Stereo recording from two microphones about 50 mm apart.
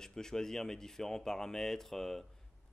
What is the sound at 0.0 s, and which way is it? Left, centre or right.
Speech, centre.